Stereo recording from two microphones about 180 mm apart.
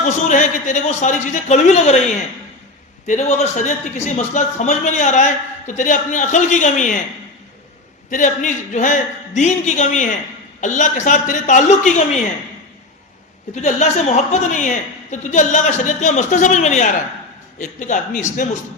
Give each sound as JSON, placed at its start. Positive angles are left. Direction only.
{"t": 0.0, "sound": "a woman's voice", "side_deg": 45}
{"t": 3.1, "sound": "a man's voice", "side_deg": 40}
{"t": 8.1, "sound": "a man's voice", "side_deg": 45}
{"t": 13.5, "sound": "a woman's voice", "side_deg": 40}